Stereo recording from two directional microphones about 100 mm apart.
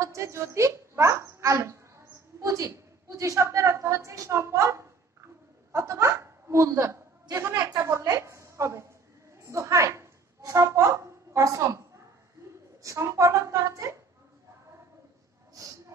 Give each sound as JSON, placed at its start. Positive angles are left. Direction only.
{"t": 0.0, "sound": "speech", "side_deg": -30}
{"t": 2.4, "sound": "a sound", "side_deg": -35}
{"t": 5.7, "sound": "chuckle", "side_deg": -30}
{"t": 7.9, "sound": "a sound", "side_deg": -30}
{"t": 11.3, "sound": "a woman's voice", "side_deg": -30}
{"t": 12.8, "sound": "a woman's voice", "side_deg": -30}